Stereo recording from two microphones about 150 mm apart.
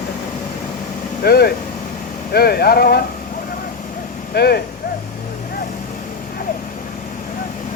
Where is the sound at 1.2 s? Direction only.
90° left.